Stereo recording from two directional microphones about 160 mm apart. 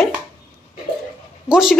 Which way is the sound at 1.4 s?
5° right (ahead or behind).